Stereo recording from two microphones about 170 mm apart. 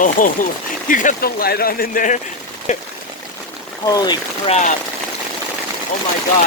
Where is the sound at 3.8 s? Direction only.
25° left (ahead or behind).